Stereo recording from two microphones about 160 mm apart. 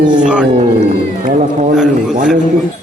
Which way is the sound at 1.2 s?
50° right (ahead or behind).